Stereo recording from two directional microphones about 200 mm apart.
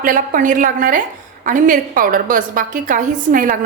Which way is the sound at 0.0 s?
45° right (ahead or behind).